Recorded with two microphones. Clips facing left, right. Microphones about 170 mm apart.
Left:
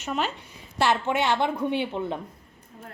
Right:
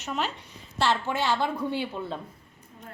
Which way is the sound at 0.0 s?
5° left (ahead or behind).